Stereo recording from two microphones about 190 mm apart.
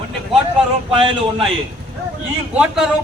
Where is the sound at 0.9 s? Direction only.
25° right (ahead or behind).